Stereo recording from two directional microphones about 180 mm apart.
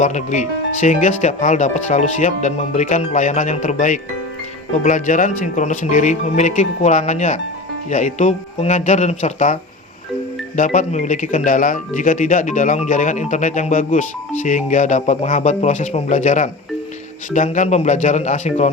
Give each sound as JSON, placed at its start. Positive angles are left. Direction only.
{"t": 0.0, "sound": "speech", "side_deg": 40}